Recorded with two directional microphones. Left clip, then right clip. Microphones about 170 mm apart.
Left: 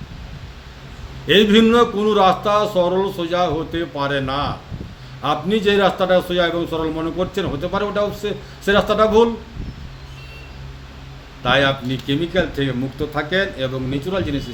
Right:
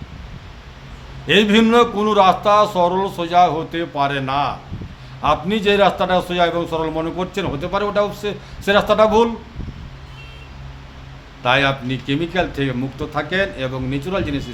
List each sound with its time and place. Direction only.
1.3 s a man's voice: 20° right (ahead or behind)
11.4 s a man's voice: 20° right (ahead or behind)